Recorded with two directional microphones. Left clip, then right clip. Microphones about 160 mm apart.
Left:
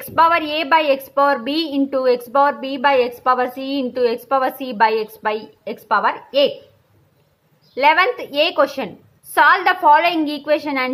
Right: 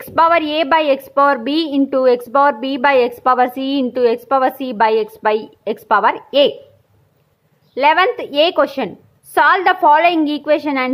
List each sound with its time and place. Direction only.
0.0 s a woman's voice: 35° right (ahead or behind); by 6.5 s 55° right (ahead or behind)
7.7 s a woman's voice: 35° right (ahead or behind)